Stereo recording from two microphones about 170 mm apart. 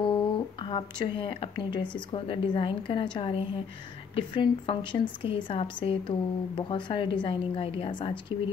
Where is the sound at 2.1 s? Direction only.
30° left (ahead or behind).